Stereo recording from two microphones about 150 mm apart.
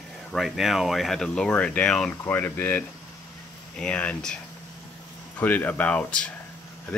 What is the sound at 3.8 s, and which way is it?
Speech, 10° left (ahead or behind).